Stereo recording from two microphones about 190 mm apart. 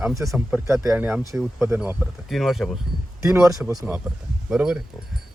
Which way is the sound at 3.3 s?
15° right (ahead or behind).